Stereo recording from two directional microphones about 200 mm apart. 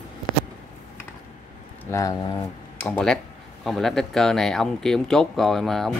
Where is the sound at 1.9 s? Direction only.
15° left (ahead or behind).